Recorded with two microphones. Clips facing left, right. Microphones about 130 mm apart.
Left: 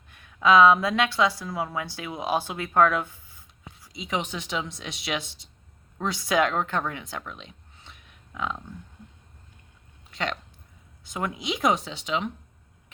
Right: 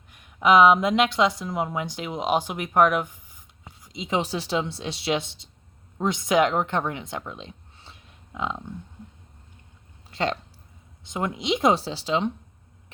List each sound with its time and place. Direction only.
0.1 s a woman's voice: 15° right (ahead or behind)
4.2 s a woman's voice: 35° right (ahead or behind)
10.1 s a sound: 30° right (ahead or behind)
11.0 s a woman's voice: 25° right (ahead or behind)